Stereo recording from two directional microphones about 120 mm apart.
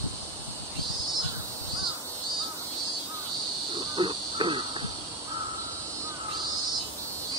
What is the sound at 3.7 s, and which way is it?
Cricket, 45° right (ahead or behind).